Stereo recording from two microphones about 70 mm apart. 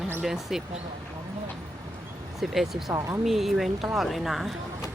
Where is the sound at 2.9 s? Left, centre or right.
Right.